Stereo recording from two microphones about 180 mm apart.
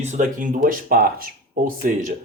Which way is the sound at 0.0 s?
45° right (ahead or behind).